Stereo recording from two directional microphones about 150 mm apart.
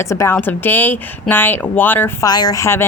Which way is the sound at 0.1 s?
20° left (ahead or behind).